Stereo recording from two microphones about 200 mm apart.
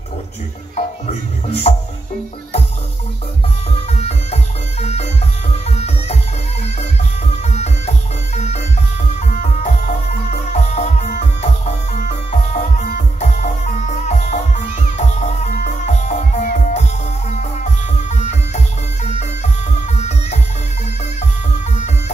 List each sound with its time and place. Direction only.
0.7 s music: 35° left (ahead or behind)
3.9 s music: 30° left (ahead or behind)
7.4 s music: 35° left (ahead or behind)
19.0 s music: 35° left (ahead or behind)